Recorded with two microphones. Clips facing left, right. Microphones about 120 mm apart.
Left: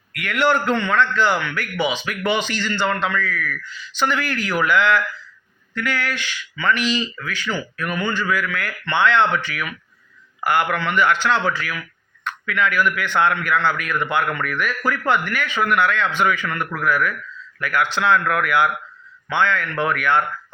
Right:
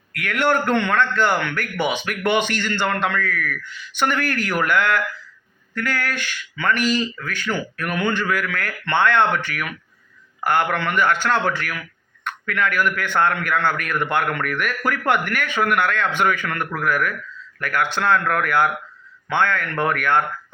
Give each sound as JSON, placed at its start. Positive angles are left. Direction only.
{"t": 0.2, "sound": "a man's voice", "side_deg": -50}